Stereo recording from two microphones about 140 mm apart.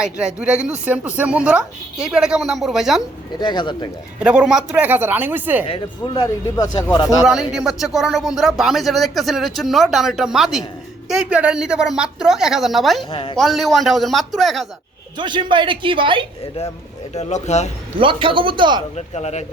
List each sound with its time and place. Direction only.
0.0 s speech: 5° right (ahead or behind)
3.4 s speech: 35° left (ahead or behind)
4.2 s speech: 10° right (ahead or behind)
6.1 s speech: 25° left (ahead or behind)
7.2 s speech: 5° right (ahead or behind)
13.1 s speech: 40° left (ahead or behind)
13.3 s speech: centre (ahead or behind)
15.2 s speech: 35° right (ahead or behind)
17.2 s speech: 55° left (ahead or behind)
18.0 s speech: 35° right (ahead or behind)
18.9 s speech: 50° left (ahead or behind)